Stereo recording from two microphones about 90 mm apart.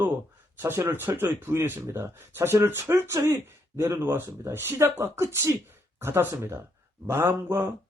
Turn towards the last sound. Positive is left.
turn(degrees=-25)  # may be behind; listen again after turning